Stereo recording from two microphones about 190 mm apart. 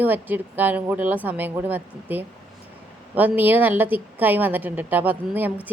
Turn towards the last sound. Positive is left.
turn(degrees=-10)  # may be behind; listen again after turning